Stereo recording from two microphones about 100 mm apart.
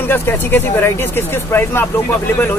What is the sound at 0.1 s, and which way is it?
Speech, 20° left (ahead or behind).